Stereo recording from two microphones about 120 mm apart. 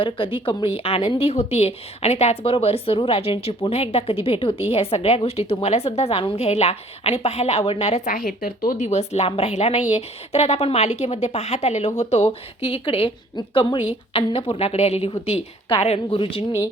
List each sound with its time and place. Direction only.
0.0 s speech: 45° left (ahead or behind); by 8.2 s 80° left
8.8 s speech: 65° left (ahead or behind)
12.6 s a woman's voice: 50° left (ahead or behind)